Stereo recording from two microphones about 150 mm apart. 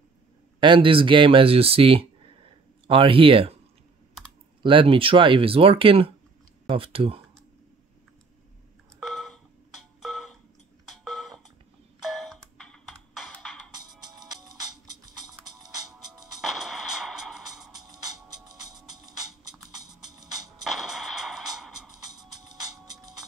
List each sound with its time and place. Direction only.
0.6 s speech: 35° right (ahead or behind)
4.6 s speech: 35° right (ahead or behind)
9.0 s a sound: centre (ahead or behind)
13.7 s music: 25° right (ahead or behind)
16.3 s music: centre (ahead or behind)
17.6 s music: 25° right (ahead or behind)
20.6 s music: 5° right (ahead or behind)
22.2 s music: 25° right (ahead or behind)